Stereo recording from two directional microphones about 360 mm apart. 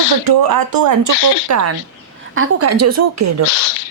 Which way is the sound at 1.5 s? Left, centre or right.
Right.